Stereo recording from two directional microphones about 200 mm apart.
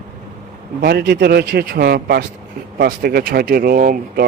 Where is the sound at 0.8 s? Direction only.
55° right (ahead or behind).